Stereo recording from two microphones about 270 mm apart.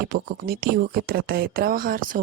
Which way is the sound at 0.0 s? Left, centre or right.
Right.